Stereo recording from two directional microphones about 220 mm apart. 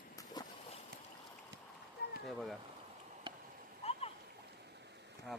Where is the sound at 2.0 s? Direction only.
45° left (ahead or behind).